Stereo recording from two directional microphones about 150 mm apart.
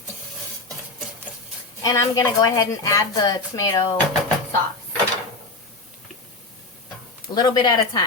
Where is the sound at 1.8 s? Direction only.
25° left (ahead or behind).